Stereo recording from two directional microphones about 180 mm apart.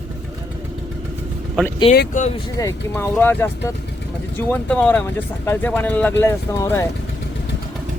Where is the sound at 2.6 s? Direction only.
10° left (ahead or behind).